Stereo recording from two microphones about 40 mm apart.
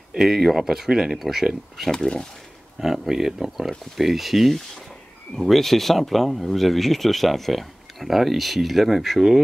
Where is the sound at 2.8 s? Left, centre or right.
Centre.